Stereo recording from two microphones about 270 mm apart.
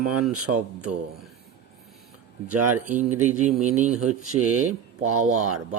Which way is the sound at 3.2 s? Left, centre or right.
Right.